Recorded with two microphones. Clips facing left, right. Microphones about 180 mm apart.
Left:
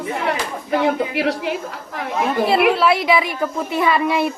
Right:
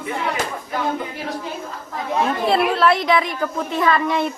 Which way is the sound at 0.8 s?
85° left.